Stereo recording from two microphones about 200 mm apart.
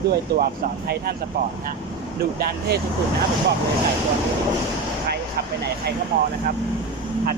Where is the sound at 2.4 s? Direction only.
55° right (ahead or behind).